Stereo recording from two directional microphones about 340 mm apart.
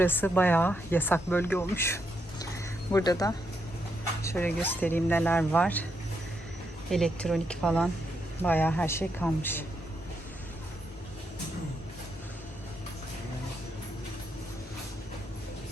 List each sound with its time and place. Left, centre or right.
0.0 s speech: centre
6.9 s speech: centre